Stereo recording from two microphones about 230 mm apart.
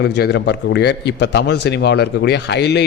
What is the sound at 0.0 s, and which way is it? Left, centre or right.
A man's voice, left.